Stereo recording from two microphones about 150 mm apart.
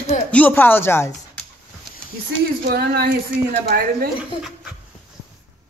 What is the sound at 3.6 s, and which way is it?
Speech, 75° right (ahead or behind).